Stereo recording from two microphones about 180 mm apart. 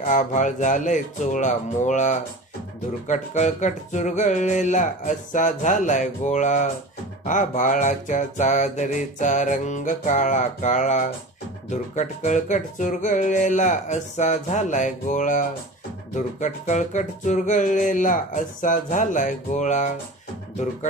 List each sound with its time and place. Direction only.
0.0 s mantra: 45° left (ahead or behind)